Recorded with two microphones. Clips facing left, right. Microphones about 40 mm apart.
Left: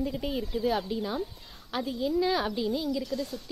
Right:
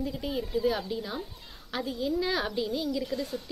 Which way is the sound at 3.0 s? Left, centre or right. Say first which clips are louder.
Even; right.